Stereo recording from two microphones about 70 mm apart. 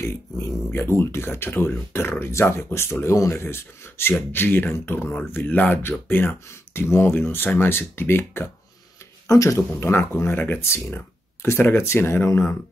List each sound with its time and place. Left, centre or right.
0.0 s speech: left
9.3 s speech: left
9.8 s speech: left
10.6 s speech: left